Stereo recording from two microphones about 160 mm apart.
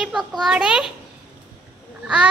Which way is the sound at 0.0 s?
Centre (ahead or behind).